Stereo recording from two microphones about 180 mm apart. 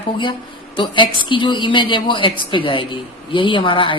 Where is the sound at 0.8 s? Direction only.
25° left (ahead or behind).